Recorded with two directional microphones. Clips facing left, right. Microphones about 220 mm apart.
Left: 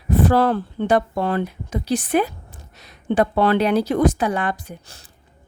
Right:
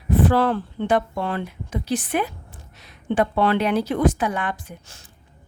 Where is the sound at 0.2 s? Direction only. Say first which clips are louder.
Left 2 dB; 40° left (ahead or behind).